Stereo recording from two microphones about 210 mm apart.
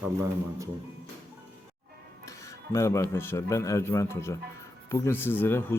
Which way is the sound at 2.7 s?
15° left (ahead or behind).